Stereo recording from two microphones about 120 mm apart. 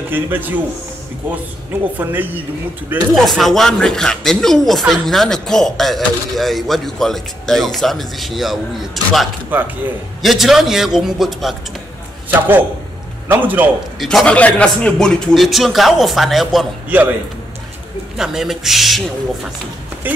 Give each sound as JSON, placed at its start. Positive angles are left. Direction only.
{"t": 0.1, "sound": "a woman's voice", "side_deg": -15}
{"t": 2.0, "sound": "a woman's voice", "side_deg": -15}
{"t": 3.2, "sound": "speech", "side_deg": 0}
{"t": 9.5, "sound": "a woman's voice", "side_deg": -15}
{"t": 10.2, "sound": "speech", "side_deg": 0}
{"t": 12.3, "sound": "a woman's voice", "side_deg": -15}
{"t": 13.9, "sound": "speech", "side_deg": 5}
{"t": 16.9, "sound": "a woman's voice", "side_deg": -15}
{"t": 18.1, "sound": "speech", "side_deg": -5}